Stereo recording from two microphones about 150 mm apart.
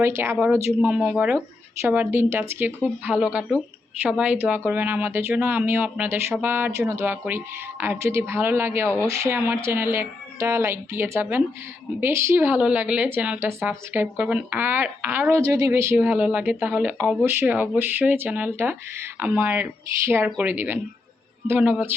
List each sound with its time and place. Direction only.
0.0 s speech: 15° right (ahead or behind)